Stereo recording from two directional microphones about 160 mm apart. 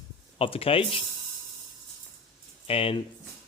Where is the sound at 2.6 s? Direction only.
35° left (ahead or behind).